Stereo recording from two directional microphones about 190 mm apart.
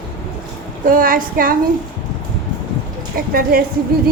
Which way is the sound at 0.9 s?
45° right (ahead or behind).